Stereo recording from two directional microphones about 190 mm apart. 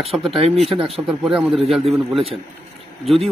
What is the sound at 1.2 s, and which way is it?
A man's voice, 5° right (ahead or behind).